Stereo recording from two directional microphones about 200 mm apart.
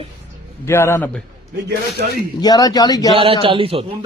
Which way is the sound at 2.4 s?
20° left (ahead or behind).